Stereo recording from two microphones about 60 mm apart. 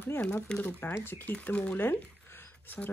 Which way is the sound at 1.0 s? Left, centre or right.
Left.